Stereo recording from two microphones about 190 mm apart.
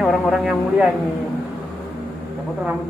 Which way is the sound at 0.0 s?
Centre (ahead or behind).